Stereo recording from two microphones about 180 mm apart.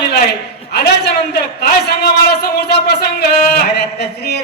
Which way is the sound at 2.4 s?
65° left (ahead or behind).